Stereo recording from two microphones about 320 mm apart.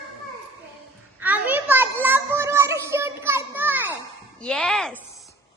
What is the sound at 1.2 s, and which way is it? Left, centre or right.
Children playing, centre.